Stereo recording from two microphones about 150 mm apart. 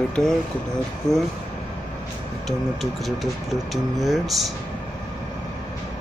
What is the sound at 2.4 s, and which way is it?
Speech, centre (ahead or behind).